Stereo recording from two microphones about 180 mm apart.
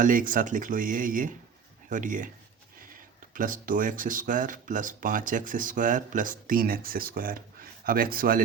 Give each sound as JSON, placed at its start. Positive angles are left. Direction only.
{"t": 0.0, "sound": "speech", "side_deg": -50}
{"t": 3.3, "sound": "speech", "side_deg": -50}